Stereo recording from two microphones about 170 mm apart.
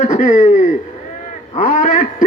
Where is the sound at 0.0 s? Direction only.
45° left (ahead or behind).